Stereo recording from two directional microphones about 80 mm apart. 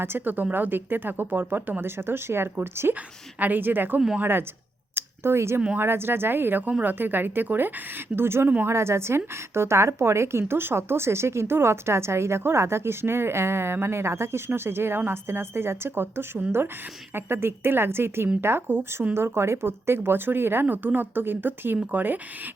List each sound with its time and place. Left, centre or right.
0.0 s a woman's voice: right